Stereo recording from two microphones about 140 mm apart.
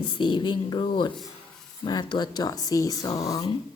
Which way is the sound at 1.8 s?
30° left (ahead or behind).